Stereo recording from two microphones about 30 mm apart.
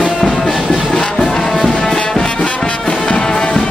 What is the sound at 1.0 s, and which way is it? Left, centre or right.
Music, left.